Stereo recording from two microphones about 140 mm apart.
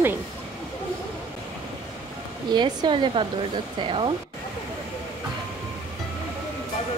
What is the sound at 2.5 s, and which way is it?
Speech, 30° right (ahead or behind).